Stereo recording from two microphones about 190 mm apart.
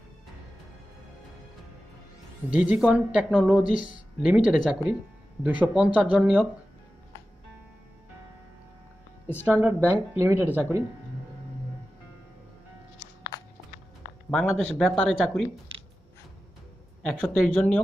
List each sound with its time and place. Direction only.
2.5 s speech: 5° right (ahead or behind)
3.7 s speech: 45° left (ahead or behind)
4.2 s speech: 5° right (ahead or behind)
9.5 s speech: 10° right (ahead or behind)
14.3 s speech: 5° left (ahead or behind)
17.0 s speech: 5° left (ahead or behind)